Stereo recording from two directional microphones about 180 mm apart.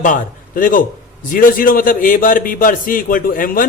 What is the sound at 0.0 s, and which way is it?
A man's voice, 50° left (ahead or behind).